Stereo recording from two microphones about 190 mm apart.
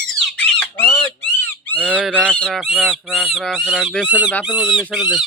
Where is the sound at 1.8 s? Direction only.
5° right (ahead or behind).